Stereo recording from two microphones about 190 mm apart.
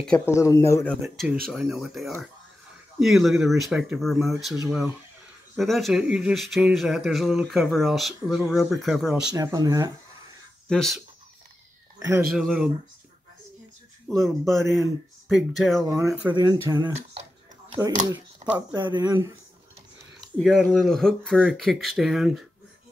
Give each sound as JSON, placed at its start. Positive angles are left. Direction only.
{"t": 0.0, "sound": "speech", "side_deg": 10}
{"t": 1.1, "sound": "speech", "side_deg": 0}
{"t": 9.3, "sound": "speech", "side_deg": -20}
{"t": 10.7, "sound": "speech", "side_deg": 0}
{"t": 12.3, "sound": "speech", "side_deg": 0}
{"t": 14.0, "sound": "speech", "side_deg": 0}
{"t": 16.0, "sound": "speech", "side_deg": -10}
{"t": 20.2, "sound": "speech", "side_deg": 0}